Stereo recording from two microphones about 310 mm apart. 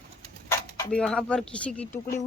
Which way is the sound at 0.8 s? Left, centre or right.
Centre.